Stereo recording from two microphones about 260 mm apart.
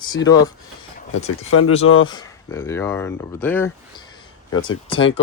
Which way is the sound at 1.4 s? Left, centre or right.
Left.